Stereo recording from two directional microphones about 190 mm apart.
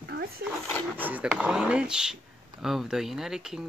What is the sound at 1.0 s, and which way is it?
Speech, 10° right (ahead or behind).